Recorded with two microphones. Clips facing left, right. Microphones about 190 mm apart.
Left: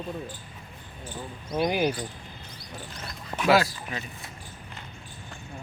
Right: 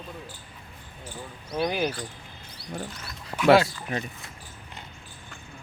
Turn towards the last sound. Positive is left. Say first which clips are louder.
# right 3 dB
turn(degrees=-25)  # may be behind; listen again after turning